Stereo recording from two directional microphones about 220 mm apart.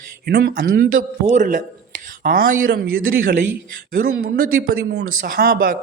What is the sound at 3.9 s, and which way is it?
A man's voice, 40° right (ahead or behind).